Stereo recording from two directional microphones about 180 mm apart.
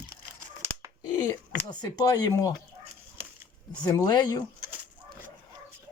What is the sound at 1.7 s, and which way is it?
Speech, 20° left (ahead or behind).